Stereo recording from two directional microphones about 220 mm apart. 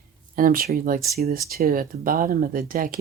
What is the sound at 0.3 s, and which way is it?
Speech, 40° right (ahead or behind).